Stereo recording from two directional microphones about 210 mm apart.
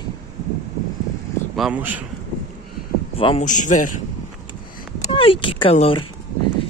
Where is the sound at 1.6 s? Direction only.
5° right (ahead or behind).